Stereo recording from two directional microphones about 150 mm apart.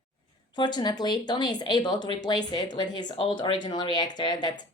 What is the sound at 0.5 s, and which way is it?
A woman's voice, 30° left (ahead or behind).